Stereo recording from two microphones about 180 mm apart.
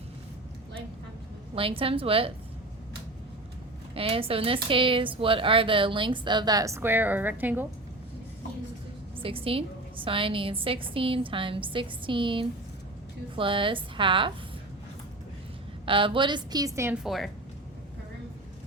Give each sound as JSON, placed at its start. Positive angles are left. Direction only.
{"t": 1.5, "sound": "a woman's voice", "side_deg": -30}
{"t": 3.9, "sound": "a woman's voice", "side_deg": -30}
{"t": 9.2, "sound": "a woman's voice", "side_deg": -30}
{"t": 15.9, "sound": "a woman's voice", "side_deg": -30}
{"t": 17.0, "sound": "a woman's voice", "side_deg": 0}